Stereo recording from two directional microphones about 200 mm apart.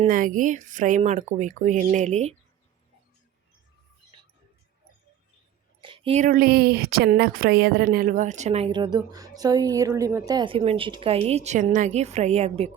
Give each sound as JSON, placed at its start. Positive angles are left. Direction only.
{"t": 0.0, "sound": "speech", "side_deg": -40}
{"t": 5.8, "sound": "speech", "side_deg": -25}